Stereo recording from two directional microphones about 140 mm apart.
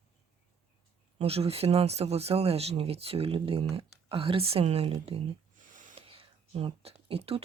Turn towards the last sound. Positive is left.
turn(degrees=-45)  # may be behind; listen again after turning